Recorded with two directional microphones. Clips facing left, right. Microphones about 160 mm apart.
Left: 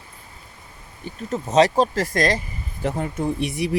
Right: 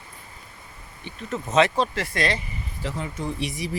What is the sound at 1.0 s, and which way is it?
Speech, 35° left (ahead or behind).